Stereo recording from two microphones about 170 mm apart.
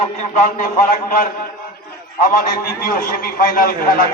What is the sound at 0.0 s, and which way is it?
A man's voice, 50° left (ahead or behind).